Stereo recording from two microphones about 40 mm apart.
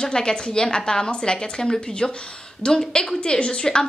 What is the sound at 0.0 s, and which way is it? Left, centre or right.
A woman's voice, centre.